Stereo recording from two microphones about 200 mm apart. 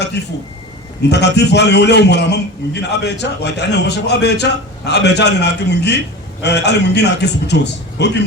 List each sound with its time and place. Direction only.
0.2 s a man's voice: 55° left (ahead or behind)